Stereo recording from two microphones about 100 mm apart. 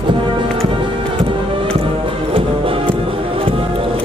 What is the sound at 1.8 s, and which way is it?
Music, 65° right (ahead or behind).